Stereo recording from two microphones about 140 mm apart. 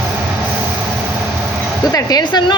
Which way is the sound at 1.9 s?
30° left (ahead or behind).